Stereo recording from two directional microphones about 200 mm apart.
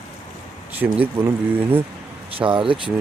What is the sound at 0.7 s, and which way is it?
Speech, 10° right (ahead or behind).